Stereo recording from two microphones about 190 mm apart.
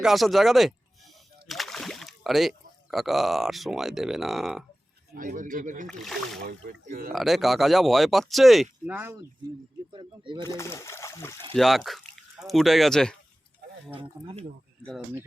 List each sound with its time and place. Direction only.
0.0 s speech: centre (ahead or behind)
5.1 s speech: 45° right (ahead or behind)
5.9 s speech: centre (ahead or behind)
6.4 s speech: 45° right (ahead or behind)
7.1 s speech: centre (ahead or behind)
8.9 s speech: 10° right (ahead or behind)
9.9 s speech: 25° right (ahead or behind)
10.4 s speech: 15° left (ahead or behind)
11.5 s speech: centre (ahead or behind)
14.0 s speech: 30° right (ahead or behind)